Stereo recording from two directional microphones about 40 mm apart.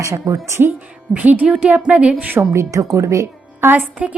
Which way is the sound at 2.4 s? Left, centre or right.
Right.